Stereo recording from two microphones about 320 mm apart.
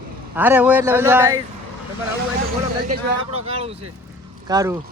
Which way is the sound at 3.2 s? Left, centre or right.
Centre.